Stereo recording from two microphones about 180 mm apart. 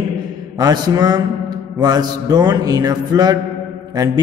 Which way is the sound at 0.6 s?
20° right (ahead or behind).